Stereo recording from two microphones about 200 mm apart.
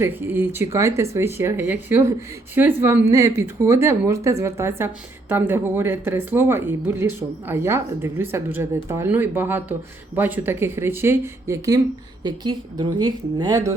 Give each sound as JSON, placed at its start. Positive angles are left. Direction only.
{"t": 0.0, "sound": "a woman's voice", "side_deg": -10}